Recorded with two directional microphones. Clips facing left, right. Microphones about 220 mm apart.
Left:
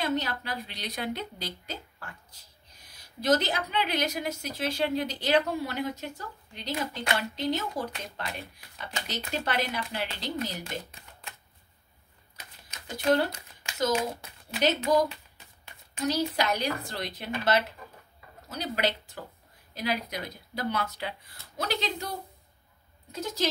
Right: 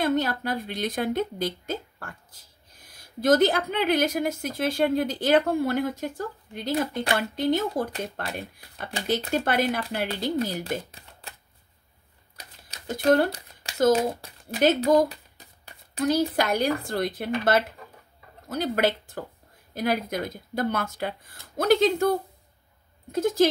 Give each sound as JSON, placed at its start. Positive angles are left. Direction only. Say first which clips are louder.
{"t": 0.0, "sound": "speech", "louder": "right 6 dB", "side_deg": -50}
{"t": 11.0, "sound": "shuffling cards", "louder": "right 2 dB", "side_deg": -35}
{"t": 12.8, "sound": "speech", "louder": "right 5 dB", "side_deg": -55}
{"t": 13.3, "sound": "a sound", "louder": "right 5 dB", "side_deg": -35}
{"t": 13.7, "sound": "a child's voice", "louder": "right 7 dB", "side_deg": -50}
{"t": 23.1, "sound": "speech", "louder": "right 10 dB", "side_deg": -50}